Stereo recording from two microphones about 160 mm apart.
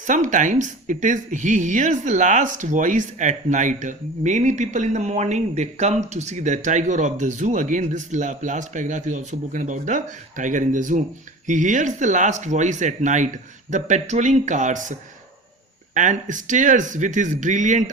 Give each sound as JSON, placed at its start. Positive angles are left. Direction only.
{"t": 0.1, "sound": "speech", "side_deg": -50}
{"t": 16.0, "sound": "speech", "side_deg": -50}